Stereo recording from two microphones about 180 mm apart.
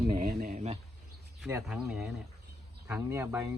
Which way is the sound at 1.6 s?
5° right (ahead or behind).